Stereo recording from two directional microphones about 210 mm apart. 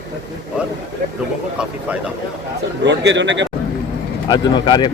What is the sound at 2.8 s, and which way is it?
Speech, 55° right (ahead or behind).